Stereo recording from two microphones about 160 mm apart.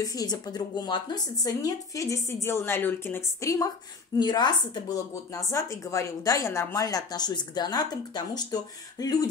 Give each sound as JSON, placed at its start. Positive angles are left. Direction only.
{"t": 0.0, "sound": "a woman's voice", "side_deg": 25}